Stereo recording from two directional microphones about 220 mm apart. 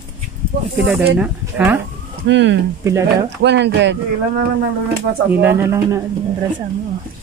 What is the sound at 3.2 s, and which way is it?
Speech, 50° right (ahead or behind).